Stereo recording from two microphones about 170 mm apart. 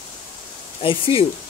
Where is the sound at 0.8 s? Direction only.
30° left (ahead or behind).